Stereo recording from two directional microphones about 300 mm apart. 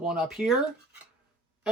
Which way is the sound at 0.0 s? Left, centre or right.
Centre.